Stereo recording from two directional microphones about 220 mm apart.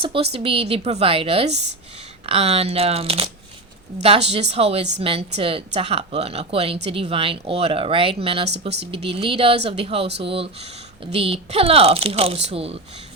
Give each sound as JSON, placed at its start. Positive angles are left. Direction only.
{"t": 0.0, "sound": "a woman's voice", "side_deg": -25}